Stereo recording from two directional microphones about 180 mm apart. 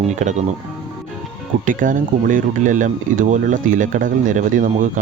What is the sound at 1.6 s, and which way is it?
Speech, 45° right (ahead or behind).